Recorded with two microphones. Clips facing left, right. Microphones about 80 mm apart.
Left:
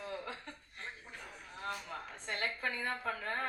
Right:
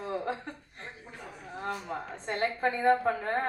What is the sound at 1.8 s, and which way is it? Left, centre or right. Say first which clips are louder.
A woman's voice: right 8 dB; right.